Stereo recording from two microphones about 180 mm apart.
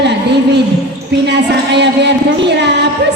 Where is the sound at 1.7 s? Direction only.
70° right (ahead or behind).